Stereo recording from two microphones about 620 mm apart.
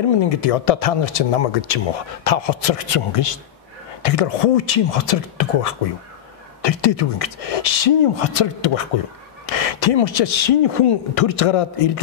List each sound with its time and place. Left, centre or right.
0.1 s speech: left